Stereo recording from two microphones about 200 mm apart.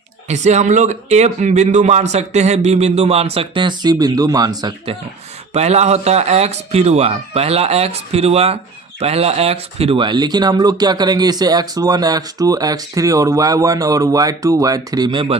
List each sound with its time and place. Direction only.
0.3 s a man's voice: 35° right (ahead or behind)
5.5 s a man's voice: 35° right (ahead or behind)